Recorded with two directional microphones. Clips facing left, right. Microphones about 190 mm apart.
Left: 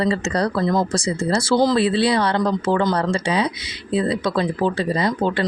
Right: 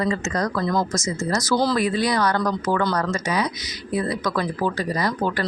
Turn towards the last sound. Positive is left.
turn(degrees=25)  # may be behind; listen again after turning